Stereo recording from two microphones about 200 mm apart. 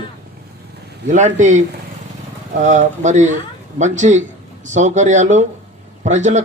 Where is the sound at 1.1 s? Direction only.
35° right (ahead or behind).